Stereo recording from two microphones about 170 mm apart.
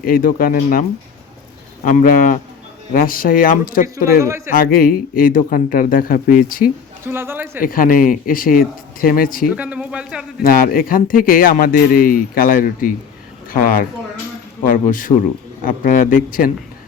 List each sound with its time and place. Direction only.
0.0 s a man's voice: 55° left (ahead or behind)
3.8 s speech: 20° right (ahead or behind)
4.5 s speech: 60° left (ahead or behind)
7.0 s a man's voice: 15° right (ahead or behind)
7.6 s speech: 55° left (ahead or behind)
9.5 s speech: 10° right (ahead or behind)
10.4 s a man's voice: 55° left (ahead or behind)